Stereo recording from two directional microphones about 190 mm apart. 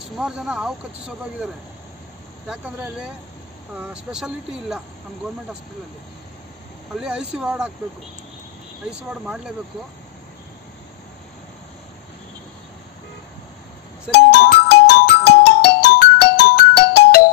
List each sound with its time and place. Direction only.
0.2 s speech: 5° right (ahead or behind)
2.4 s speech: 5° right (ahead or behind)
7.0 s speech: 5° right (ahead or behind)
9.1 s speech: 5° right (ahead or behind)
14.1 s music: 60° left (ahead or behind)